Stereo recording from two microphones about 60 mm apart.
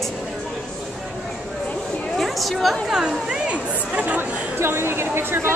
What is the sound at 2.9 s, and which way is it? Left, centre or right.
Chatter, centre.